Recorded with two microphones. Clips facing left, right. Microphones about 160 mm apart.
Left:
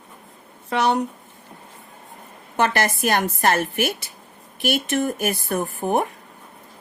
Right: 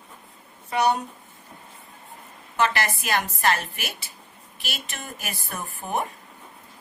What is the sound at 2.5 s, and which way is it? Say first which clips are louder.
A woman's voice: left 3 dB; 50° left (ahead or behind).